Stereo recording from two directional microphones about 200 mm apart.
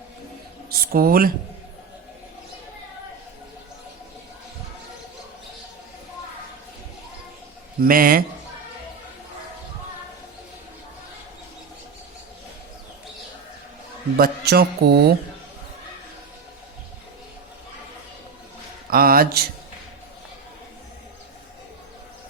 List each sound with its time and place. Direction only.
0.7 s speech: 50° right (ahead or behind)
7.9 s speech: 45° right (ahead or behind)
14.2 s speech: 50° right (ahead or behind)
18.9 s mantra: 50° right (ahead or behind)